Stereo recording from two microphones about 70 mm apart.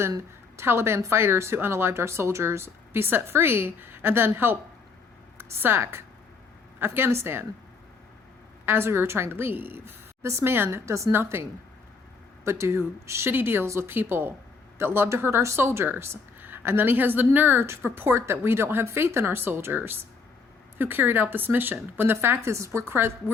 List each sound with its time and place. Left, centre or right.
0.2 s a woman's voice: right
8.6 s a woman's voice: right
11.1 s a woman's voice: right
12.5 s a woman's voice: right